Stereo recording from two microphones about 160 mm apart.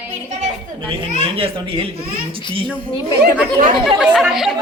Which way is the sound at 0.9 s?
35° right (ahead or behind).